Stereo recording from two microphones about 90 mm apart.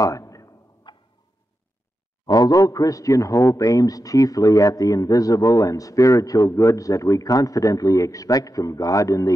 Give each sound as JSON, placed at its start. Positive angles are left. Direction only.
{"t": 0.0, "sound": "a sound", "side_deg": 35}
{"t": 0.8, "sound": "tick-tock", "side_deg": 60}
{"t": 2.2, "sound": "a man's voice", "side_deg": 45}